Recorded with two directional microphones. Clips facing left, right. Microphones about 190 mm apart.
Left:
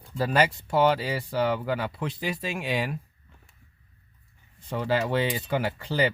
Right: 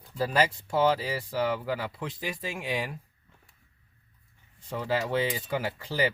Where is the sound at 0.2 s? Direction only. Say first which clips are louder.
Left 2 dB; 65° left (ahead or behind).